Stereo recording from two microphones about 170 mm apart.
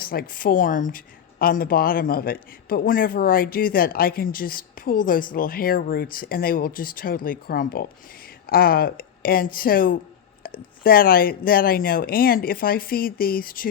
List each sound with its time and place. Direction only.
0.0 s speech: 60° left (ahead or behind)